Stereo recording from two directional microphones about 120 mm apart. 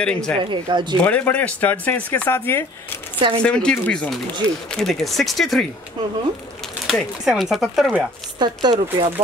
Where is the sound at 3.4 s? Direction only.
10° left (ahead or behind).